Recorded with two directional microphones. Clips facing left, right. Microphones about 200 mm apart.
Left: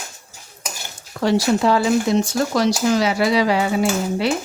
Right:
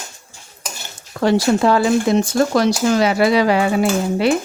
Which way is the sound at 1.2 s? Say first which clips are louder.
Right 2 dB; 55° right (ahead or behind).